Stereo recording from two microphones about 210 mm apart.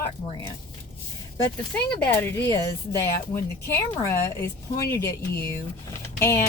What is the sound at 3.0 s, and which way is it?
Speech, 15° left (ahead or behind).